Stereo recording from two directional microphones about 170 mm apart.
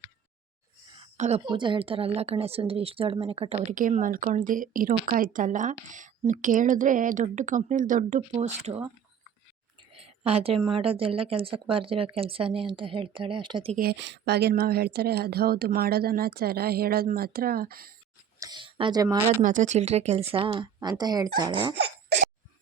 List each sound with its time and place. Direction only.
0.9 s a sound: 40° right (ahead or behind)
1.5 s a woman's voice: 30° right (ahead or behind)
3.8 s a woman's voice: 50° right (ahead or behind)
9.9 s a woman's voice: 35° right (ahead or behind)
13.7 s a woman's voice: 75° right (ahead or behind); by 17.9 s 60° right (ahead or behind)
18.3 s a sound: 25° right (ahead or behind)
19.0 s speech: 15° right (ahead or behind)
19.4 s a woman's voice: 45° right (ahead or behind); by 20.7 s 30° right (ahead or behind)
20.7 s speech: 20° right (ahead or behind)